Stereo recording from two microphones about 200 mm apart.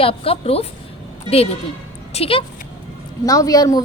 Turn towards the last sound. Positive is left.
turn(degrees=20)  # may be behind; listen again after turning